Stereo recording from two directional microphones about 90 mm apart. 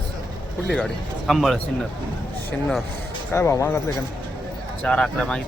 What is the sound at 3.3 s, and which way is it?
Speech, 30° left (ahead or behind).